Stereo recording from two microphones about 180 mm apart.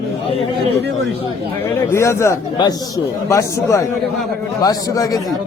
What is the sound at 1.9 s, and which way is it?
A man's voice, 15° left (ahead or behind).